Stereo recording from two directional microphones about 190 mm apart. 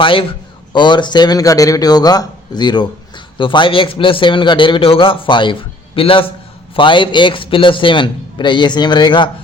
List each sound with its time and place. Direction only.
0.0 s a man's voice: 25° left (ahead or behind)